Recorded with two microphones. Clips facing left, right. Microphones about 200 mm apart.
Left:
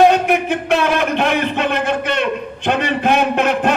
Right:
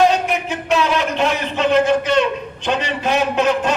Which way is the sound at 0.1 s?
55° left (ahead or behind).